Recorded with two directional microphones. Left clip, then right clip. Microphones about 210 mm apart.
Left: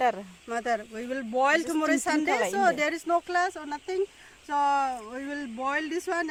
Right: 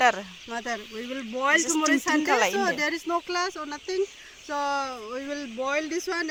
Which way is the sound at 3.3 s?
30° left (ahead or behind).